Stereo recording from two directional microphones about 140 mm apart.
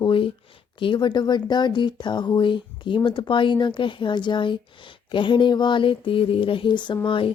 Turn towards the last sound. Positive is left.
turn(degrees=35)  # may be behind; listen again after turning